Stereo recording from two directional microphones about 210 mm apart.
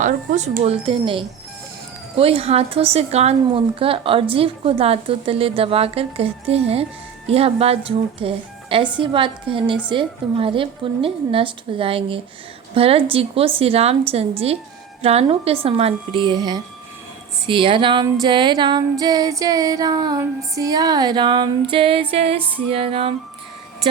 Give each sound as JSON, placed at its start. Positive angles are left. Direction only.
{"t": 0.0, "sound": "a woman's voice", "side_deg": -35}